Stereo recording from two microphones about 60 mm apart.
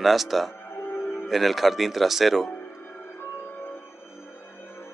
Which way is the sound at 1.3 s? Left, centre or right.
Centre.